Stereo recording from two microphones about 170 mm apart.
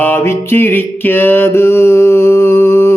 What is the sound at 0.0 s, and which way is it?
Music, 15° left (ahead or behind).